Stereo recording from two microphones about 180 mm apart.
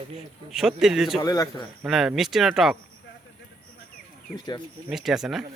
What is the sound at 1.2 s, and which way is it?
Speech, 20° left (ahead or behind).